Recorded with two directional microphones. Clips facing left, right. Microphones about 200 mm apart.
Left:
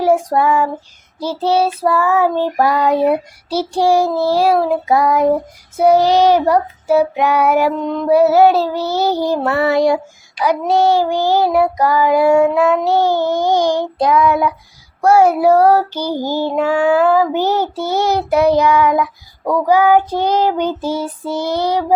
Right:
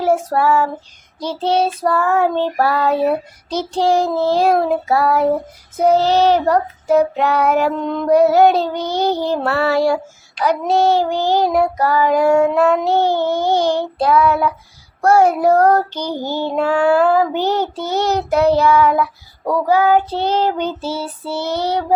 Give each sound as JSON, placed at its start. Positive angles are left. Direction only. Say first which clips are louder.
{"t": 0.0, "sound": "child singing", "louder": "left 2 dB", "side_deg": 15}